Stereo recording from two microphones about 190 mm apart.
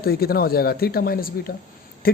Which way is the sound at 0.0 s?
55° left (ahead or behind).